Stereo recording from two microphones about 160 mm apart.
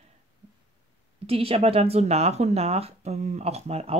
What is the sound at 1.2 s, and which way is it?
Speech, 35° right (ahead or behind).